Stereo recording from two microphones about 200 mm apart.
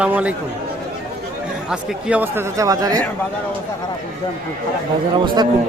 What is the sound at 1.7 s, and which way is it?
A man's voice, 5° right (ahead or behind).